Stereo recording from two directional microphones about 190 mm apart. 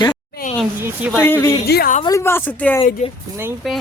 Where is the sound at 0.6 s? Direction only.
5° right (ahead or behind).